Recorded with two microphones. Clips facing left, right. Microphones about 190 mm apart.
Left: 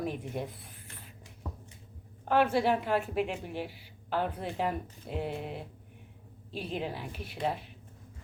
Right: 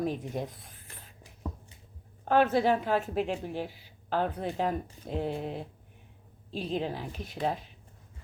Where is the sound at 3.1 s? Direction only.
40° right (ahead or behind).